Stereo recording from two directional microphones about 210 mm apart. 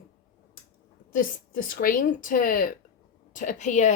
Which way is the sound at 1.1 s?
40° left (ahead or behind).